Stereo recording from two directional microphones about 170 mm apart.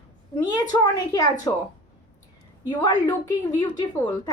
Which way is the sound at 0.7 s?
20° left (ahead or behind).